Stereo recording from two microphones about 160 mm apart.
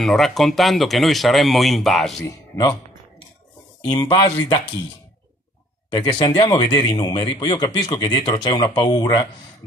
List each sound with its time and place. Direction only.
0.0 s speech: centre (ahead or behind)
3.9 s a man's voice: 25° left (ahead or behind)
5.9 s a man's voice: 30° left (ahead or behind)